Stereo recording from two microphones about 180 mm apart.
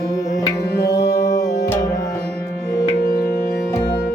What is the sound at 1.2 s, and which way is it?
Music, 20° left (ahead or behind).